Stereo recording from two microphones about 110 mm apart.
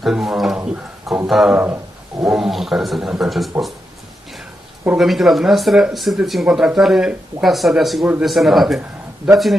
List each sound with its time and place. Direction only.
0.0 s speech: 5° right (ahead or behind)
4.9 s a man's voice: centre (ahead or behind)